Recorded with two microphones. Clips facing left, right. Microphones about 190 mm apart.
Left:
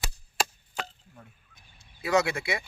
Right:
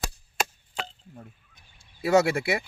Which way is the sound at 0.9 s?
35° right (ahead or behind).